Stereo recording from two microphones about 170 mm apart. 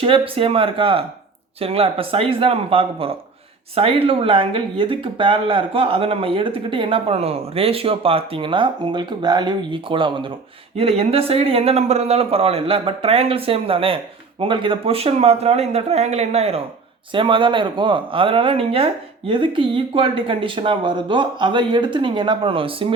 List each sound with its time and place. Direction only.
0.0 s speech: 30° right (ahead or behind)